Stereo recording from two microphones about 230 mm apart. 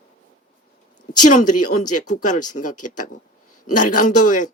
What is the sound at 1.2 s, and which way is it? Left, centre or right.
Speech, left.